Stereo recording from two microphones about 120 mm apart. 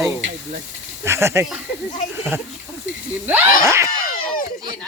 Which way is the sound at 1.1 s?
20° right (ahead or behind).